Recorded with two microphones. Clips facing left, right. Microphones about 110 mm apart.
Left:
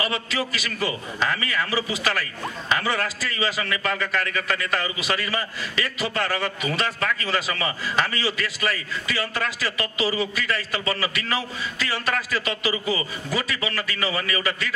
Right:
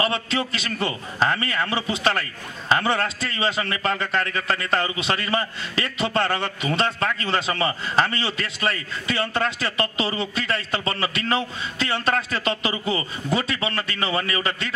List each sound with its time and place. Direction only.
0.0 s a man's voice: 30° right (ahead or behind)